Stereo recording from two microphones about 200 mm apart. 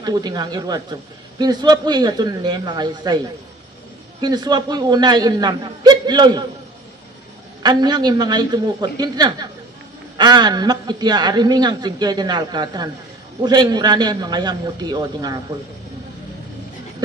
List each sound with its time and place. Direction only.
0.0 s a woman's voice: 20° right (ahead or behind)
4.2 s a woman's voice: 20° right (ahead or behind)
7.6 s a woman's voice: 20° right (ahead or behind)